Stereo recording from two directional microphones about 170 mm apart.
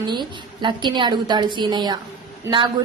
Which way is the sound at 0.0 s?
25° right (ahead or behind).